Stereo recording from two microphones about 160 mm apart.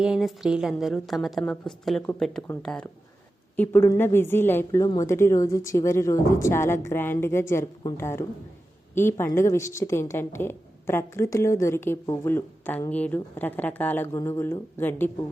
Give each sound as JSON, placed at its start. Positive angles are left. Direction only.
{"t": 0.0, "sound": "a woman's voice", "side_deg": -5}